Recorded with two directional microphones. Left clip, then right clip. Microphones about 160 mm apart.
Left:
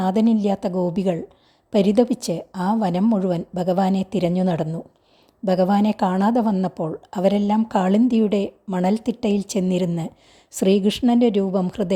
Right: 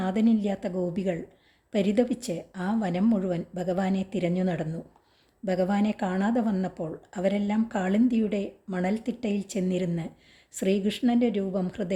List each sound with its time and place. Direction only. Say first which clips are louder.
0.0 s a woman's voice: left 7 dB; 30° left (ahead or behind)